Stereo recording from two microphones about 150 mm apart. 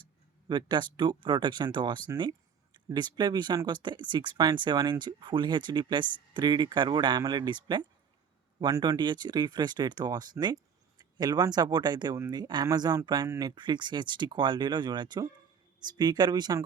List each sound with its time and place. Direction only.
0.4 s speech: 30° right (ahead or behind)